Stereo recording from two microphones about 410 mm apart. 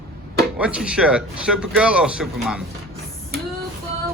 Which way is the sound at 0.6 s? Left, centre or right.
Centre.